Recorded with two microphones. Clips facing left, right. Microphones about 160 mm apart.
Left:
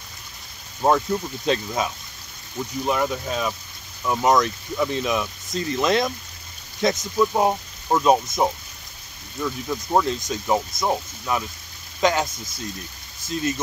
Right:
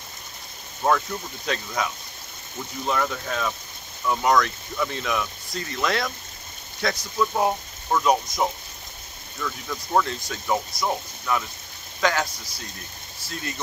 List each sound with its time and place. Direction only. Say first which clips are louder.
0.8 s speech: left 3 dB; 25° left (ahead or behind)
2.9 s speech: left 2 dB; 20° left (ahead or behind)